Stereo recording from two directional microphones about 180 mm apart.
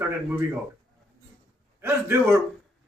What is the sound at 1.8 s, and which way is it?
Speech, 10° right (ahead or behind).